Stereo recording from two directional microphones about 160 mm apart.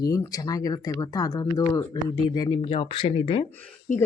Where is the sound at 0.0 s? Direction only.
20° left (ahead or behind).